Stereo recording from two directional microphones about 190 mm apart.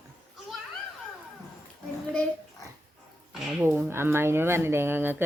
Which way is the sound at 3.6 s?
10° right (ahead or behind).